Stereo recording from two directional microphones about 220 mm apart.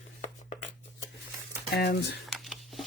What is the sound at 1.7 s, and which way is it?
Speech, 45° left (ahead or behind).